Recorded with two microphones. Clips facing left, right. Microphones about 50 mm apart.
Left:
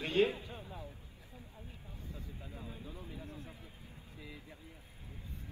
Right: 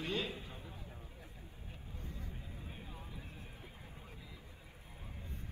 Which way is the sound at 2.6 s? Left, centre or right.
Right.